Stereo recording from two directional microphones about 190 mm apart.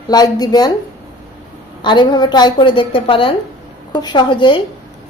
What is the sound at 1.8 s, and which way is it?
A woman's voice, 25° left (ahead or behind).